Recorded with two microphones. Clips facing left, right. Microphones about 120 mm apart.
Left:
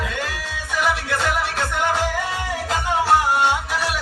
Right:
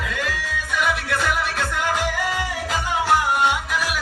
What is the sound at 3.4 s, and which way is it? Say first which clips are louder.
Music: left 1 dB; 30° left (ahead or behind).